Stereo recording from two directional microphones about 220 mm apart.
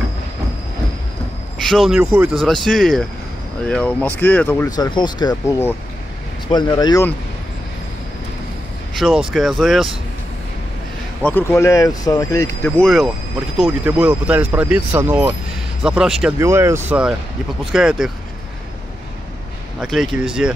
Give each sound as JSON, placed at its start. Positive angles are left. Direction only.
{"t": 1.6, "sound": "speech", "side_deg": 0}
{"t": 8.9, "sound": "speech", "side_deg": 0}
{"t": 11.2, "sound": "speech", "side_deg": 10}
{"t": 19.8, "sound": "speech", "side_deg": 0}